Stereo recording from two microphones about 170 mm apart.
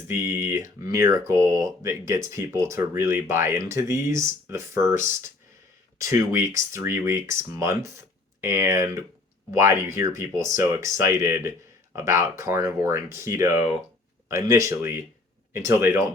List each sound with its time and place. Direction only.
0.1 s speech: 15° right (ahead or behind)
6.0 s speech: 15° right (ahead or behind)